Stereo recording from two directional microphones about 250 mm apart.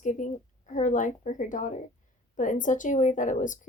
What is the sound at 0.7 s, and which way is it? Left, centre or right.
A woman's voice, left.